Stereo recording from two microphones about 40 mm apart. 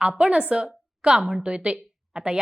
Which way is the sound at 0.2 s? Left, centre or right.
Right.